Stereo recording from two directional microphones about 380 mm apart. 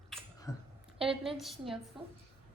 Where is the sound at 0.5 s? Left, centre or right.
Centre.